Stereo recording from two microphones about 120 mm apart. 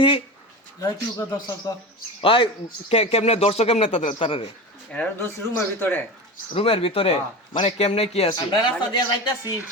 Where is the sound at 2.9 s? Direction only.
60° left (ahead or behind).